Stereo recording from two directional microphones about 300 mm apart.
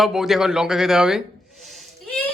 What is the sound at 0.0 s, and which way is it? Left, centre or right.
A woman's voice, centre.